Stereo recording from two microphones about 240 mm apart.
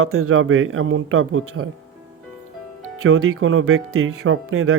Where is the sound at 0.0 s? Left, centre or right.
Right.